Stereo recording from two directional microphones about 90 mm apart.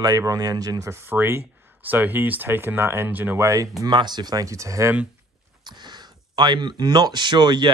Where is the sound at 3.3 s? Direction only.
35° right (ahead or behind).